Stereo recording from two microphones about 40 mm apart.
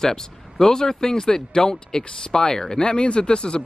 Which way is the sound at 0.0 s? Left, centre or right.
Centre.